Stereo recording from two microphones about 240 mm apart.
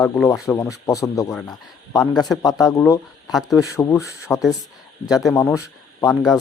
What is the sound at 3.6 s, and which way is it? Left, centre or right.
A man's voice, centre.